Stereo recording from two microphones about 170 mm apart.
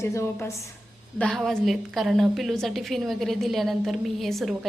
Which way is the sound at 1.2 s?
Centre (ahead or behind).